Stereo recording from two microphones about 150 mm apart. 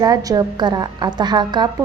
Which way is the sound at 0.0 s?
25° right (ahead or behind).